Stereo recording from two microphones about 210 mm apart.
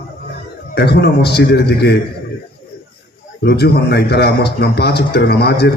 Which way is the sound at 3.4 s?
50° left (ahead or behind).